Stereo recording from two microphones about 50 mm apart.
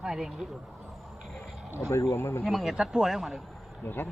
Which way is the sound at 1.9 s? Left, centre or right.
Left.